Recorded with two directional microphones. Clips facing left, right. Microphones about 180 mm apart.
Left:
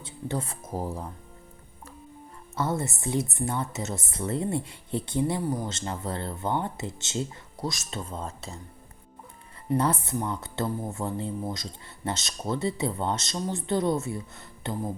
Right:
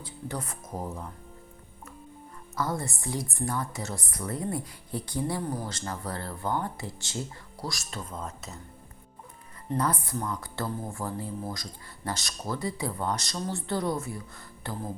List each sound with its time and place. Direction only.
0.0 s speech: 25° left (ahead or behind)
2.6 s speech: 25° left (ahead or behind)
9.7 s speech: 25° left (ahead or behind)